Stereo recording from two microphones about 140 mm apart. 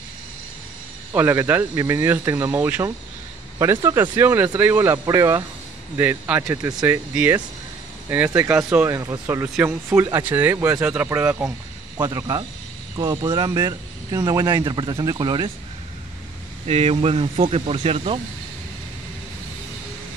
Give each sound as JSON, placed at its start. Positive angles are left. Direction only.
{"t": 1.1, "sound": "speech", "side_deg": -15}
{"t": 5.9, "sound": "speech", "side_deg": -10}
{"t": 10.8, "sound": "speech", "side_deg": -10}
{"t": 12.1, "sound": "speech", "side_deg": -25}
{"t": 16.6, "sound": "speech", "side_deg": -45}